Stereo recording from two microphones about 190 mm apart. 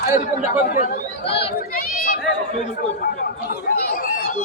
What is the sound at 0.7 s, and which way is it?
Speech, 45° left (ahead or behind).